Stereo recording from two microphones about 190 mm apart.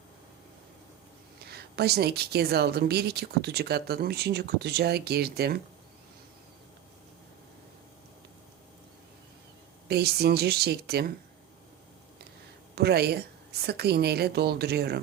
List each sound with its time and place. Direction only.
1.4 s a woman's voice: 55° right (ahead or behind)
9.9 s a woman's voice: 60° right (ahead or behind)
12.7 s a woman's voice: 60° right (ahead or behind)